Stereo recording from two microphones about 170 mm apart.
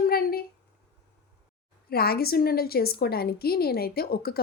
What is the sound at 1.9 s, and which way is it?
A woman's voice, 65° left (ahead or behind).